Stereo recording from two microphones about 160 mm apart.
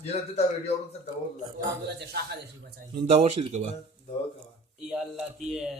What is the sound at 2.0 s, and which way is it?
Speech, 85° right.